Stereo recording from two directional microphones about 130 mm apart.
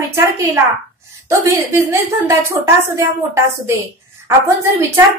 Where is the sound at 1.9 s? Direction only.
20° right (ahead or behind).